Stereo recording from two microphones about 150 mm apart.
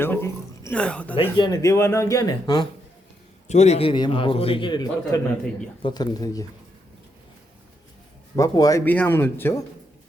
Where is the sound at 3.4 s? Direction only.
50° left (ahead or behind); by 6.4 s 25° left (ahead or behind).